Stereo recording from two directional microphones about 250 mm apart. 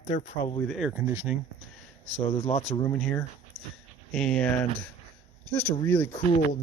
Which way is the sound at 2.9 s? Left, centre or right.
Centre.